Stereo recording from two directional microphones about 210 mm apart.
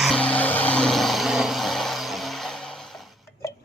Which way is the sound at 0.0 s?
5° left (ahead or behind).